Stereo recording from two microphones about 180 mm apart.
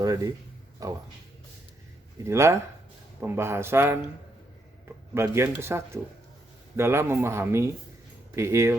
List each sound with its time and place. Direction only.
0.0 s speech: 20° right (ahead or behind)
2.2 s speech: 15° right (ahead or behind)
5.1 s speech: 15° right (ahead or behind)